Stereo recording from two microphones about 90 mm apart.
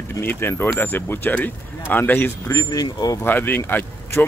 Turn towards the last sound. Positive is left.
turn(degrees=25)  # may be behind; listen again after turning